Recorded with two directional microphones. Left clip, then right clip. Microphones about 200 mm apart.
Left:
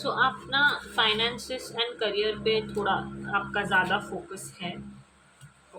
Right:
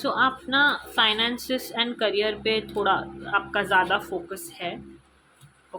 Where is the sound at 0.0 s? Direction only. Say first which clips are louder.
Right 3 dB; 40° right (ahead or behind).